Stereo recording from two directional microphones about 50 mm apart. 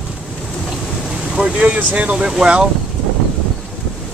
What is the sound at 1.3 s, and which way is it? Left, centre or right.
Speech, centre.